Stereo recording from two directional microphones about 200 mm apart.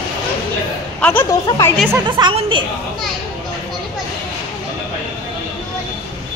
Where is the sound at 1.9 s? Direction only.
20° right (ahead or behind).